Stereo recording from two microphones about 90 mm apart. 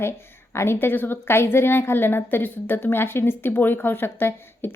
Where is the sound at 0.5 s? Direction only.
30° left (ahead or behind).